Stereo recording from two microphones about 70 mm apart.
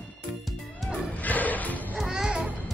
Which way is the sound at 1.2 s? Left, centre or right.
Left.